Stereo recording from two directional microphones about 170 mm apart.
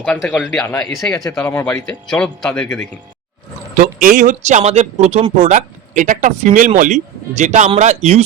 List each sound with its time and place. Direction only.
0.0 s speech: 5° left (ahead or behind)
0.7 s speech: 15° left (ahead or behind)
3.8 s speech: 50° right (ahead or behind)